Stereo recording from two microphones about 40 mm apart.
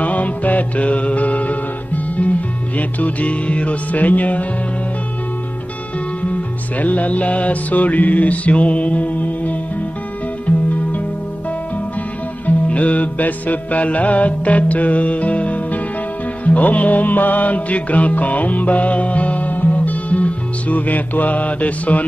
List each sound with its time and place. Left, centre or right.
0.0 s music: left
2.8 s mantra: left
6.8 s mantra: left
10.4 s music: left
12.4 s music: left